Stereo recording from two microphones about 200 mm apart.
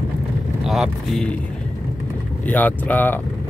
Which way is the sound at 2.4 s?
10° left (ahead or behind).